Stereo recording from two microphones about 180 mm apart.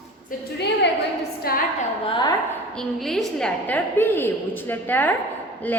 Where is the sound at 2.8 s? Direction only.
Centre (ahead or behind).